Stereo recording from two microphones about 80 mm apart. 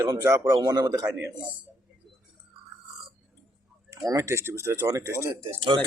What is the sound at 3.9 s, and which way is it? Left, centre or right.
Speech, right.